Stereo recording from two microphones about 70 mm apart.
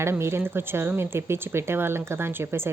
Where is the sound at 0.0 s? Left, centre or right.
Right.